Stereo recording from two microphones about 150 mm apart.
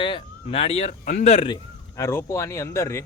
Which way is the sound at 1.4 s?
30° left (ahead or behind).